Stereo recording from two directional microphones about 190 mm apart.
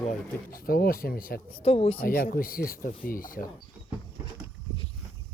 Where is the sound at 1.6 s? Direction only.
30° left (ahead or behind).